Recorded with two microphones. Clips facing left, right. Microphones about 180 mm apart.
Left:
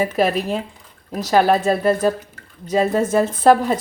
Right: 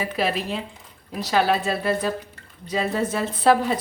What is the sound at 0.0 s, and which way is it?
Speech, 45° left (ahead or behind).